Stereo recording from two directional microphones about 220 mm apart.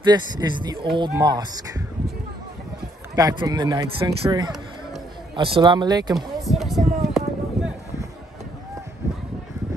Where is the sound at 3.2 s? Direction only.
15° right (ahead or behind).